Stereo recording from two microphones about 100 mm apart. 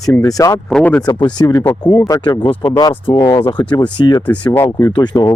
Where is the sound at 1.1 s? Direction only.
50° left (ahead or behind).